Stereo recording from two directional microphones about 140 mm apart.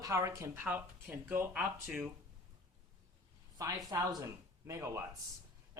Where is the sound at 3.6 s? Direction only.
25° right (ahead or behind).